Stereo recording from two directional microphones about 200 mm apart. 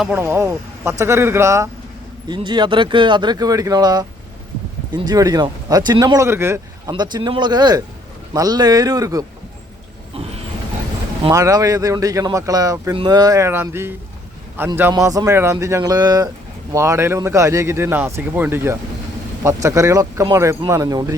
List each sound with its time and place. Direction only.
0.0 s speech: 10° right (ahead or behind)
11.2 s speech: 15° right (ahead or behind)